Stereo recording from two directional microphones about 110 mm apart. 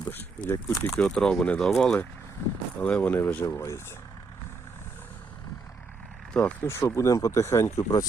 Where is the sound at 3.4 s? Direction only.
25° left (ahead or behind).